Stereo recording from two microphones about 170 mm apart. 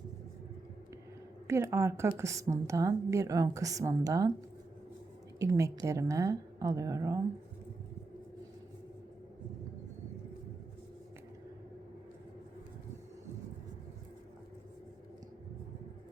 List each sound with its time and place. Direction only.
1.5 s a woman's voice: 15° right (ahead or behind)
5.4 s a woman's voice: 20° right (ahead or behind)